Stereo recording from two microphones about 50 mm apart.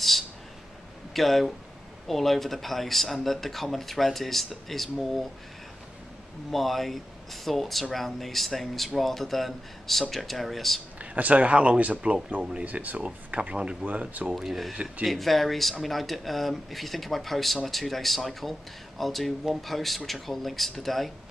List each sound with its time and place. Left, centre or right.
1.1 s speech: centre
6.5 s speech: centre
11.0 s speech: right
14.3 s speech: centre